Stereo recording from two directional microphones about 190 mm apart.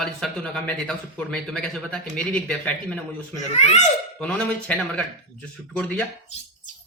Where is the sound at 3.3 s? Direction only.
35° left (ahead or behind).